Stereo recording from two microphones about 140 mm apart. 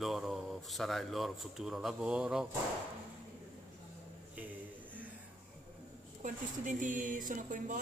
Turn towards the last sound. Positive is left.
turn(degrees=-70)  # may be behind; listen again after turning